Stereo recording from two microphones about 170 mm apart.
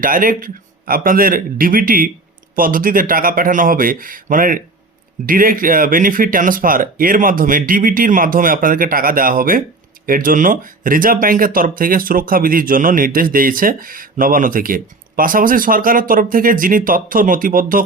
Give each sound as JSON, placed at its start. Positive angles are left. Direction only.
{"t": 0.0, "sound": "speech", "side_deg": -55}